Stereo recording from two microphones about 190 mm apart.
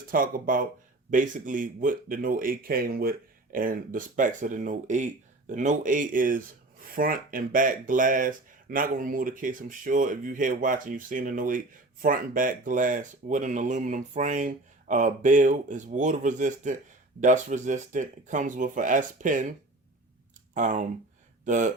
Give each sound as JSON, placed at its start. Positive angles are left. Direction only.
{"t": 0.1, "sound": "speech", "side_deg": -45}